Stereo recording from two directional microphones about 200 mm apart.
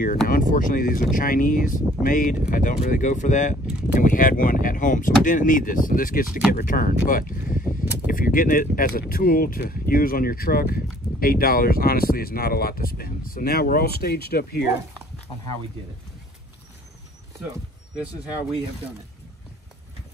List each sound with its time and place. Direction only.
0.3 s speech: 40° left (ahead or behind)
6.2 s speech: 5° right (ahead or behind)
6.5 s speech: 45° left (ahead or behind)